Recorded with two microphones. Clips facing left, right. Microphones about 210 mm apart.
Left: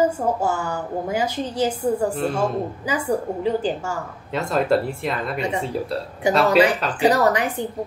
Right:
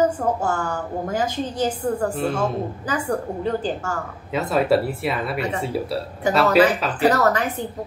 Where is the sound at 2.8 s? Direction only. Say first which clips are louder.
Left 2 dB; 10° left (ahead or behind).